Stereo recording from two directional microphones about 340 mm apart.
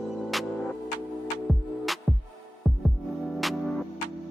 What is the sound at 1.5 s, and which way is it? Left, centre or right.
Music, centre.